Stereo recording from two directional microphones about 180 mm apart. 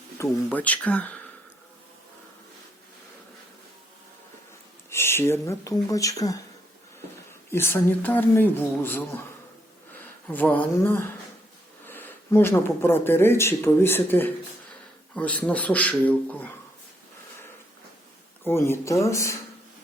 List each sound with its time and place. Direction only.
0.2 s speech: 10° left (ahead or behind)
4.9 s speech: 15° left (ahead or behind)
7.5 s speech: 10° left (ahead or behind)
18.4 s speech: 15° left (ahead or behind)